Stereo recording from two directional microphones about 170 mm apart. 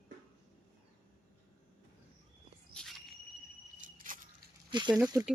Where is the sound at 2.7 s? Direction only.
Centre (ahead or behind).